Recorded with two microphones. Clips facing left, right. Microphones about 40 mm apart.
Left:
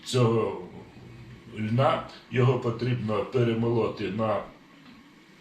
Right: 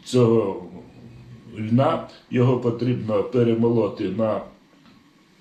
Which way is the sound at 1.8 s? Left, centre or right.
Centre.